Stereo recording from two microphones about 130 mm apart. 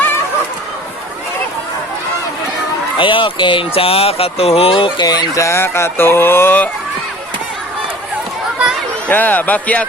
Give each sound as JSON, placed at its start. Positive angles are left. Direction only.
{"t": 3.0, "sound": "speech", "side_deg": 40}
{"t": 4.8, "sound": "speech", "side_deg": 35}
{"t": 9.0, "sound": "speech", "side_deg": 15}